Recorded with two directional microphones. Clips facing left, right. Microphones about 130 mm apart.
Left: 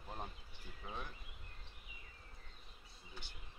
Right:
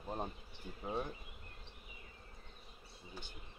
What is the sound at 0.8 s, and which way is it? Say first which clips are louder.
Speech: right 8 dB; 45° right (ahead or behind).